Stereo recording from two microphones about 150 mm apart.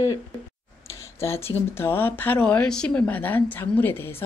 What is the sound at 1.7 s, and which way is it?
A woman's voice, 15° left (ahead or behind).